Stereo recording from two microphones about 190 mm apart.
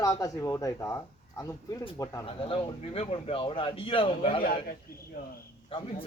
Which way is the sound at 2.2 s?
30° left (ahead or behind).